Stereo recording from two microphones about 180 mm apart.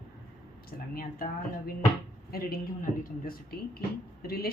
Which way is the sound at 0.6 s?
55° left (ahead or behind).